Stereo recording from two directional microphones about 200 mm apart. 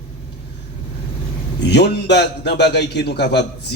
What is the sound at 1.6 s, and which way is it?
Speech, 55° left (ahead or behind).